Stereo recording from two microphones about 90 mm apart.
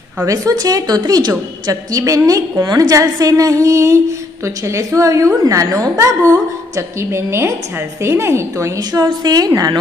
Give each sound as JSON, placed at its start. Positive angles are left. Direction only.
{"t": 0.3, "sound": "a woman's voice", "side_deg": -45}